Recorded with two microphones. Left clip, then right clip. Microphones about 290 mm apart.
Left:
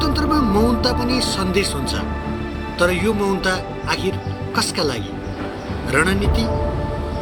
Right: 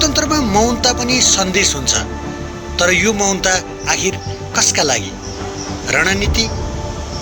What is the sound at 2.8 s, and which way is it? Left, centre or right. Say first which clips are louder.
Speech: right 5 dB; centre.